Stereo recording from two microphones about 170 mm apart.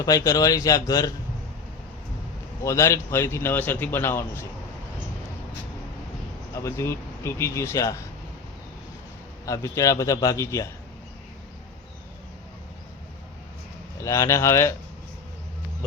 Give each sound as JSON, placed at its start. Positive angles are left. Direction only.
{"t": 0.0, "sound": "speech", "side_deg": 20}
{"t": 2.6, "sound": "a man's voice", "side_deg": 15}
{"t": 6.5, "sound": "a man's voice", "side_deg": 15}
{"t": 9.5, "sound": "a man's voice", "side_deg": 20}
{"t": 14.0, "sound": "a man's voice", "side_deg": 20}